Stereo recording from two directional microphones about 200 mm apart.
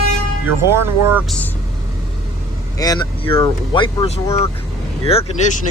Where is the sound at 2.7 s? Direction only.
20° left (ahead or behind).